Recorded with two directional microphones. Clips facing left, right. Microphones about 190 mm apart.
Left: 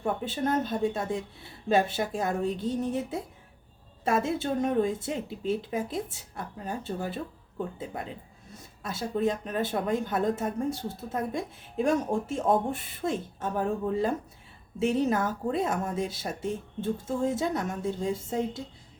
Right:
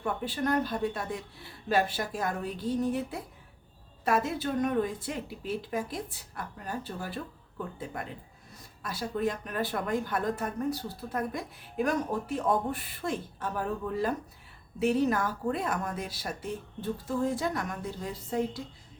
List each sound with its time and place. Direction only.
0.0 s a woman's voice: 25° left (ahead or behind)
8.8 s a woman's voice: 25° left (ahead or behind)